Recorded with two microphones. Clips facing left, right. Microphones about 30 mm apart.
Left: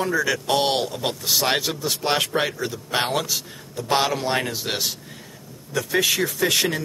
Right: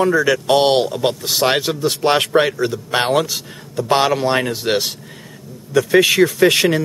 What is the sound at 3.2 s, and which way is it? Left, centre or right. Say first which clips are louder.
Speech: right 2 dB; right.